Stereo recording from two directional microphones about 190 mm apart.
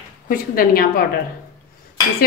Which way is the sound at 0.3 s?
50° left (ahead or behind).